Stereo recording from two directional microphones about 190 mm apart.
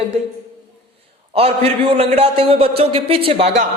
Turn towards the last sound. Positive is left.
turn(degrees=-35)  # may be behind; listen again after turning